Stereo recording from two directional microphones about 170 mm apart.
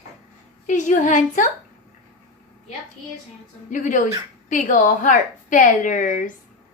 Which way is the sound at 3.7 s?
50° left (ahead or behind).